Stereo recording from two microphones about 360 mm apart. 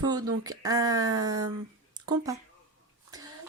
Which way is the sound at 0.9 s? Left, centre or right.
Right.